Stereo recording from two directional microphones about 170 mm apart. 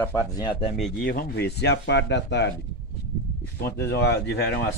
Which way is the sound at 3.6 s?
70° left (ahead or behind).